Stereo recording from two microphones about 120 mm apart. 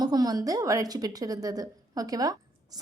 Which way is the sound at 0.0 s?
35° right (ahead or behind).